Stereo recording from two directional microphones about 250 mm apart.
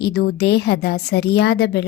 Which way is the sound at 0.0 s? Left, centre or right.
Left.